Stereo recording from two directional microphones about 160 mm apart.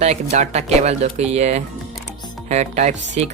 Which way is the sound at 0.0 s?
45° right (ahead or behind).